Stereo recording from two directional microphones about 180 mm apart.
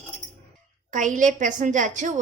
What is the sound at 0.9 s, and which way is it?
A woman's voice, 45° right (ahead or behind).